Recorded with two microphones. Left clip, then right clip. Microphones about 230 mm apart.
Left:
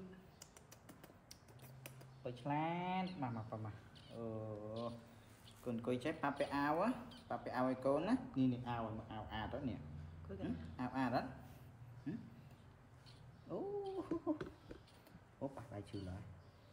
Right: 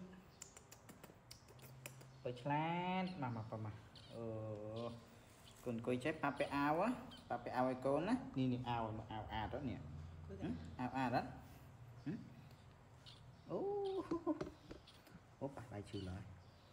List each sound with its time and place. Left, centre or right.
0.8 s typing: centre
5.6 s speech: centre
13.5 s a sound: centre
15.5 s speech: centre